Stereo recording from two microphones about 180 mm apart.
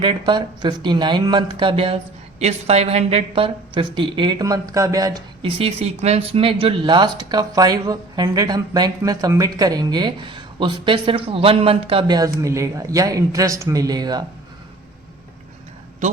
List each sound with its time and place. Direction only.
0.0 s speech: 25° right (ahead or behind)
5.5 s speech: 35° right (ahead or behind)